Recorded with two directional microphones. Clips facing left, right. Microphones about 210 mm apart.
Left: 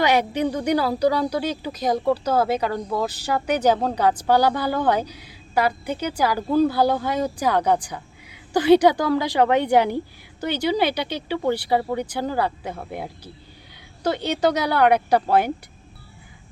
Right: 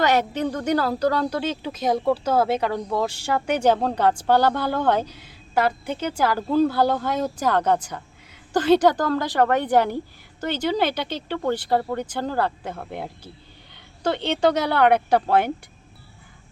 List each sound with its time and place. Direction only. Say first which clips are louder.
0.0 s speech: left 1 dB; 15° left (ahead or behind)
1.3 s speech: left 1 dB; centre (ahead or behind)